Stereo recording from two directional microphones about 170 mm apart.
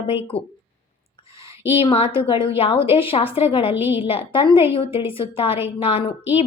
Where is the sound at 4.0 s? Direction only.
35° left (ahead or behind).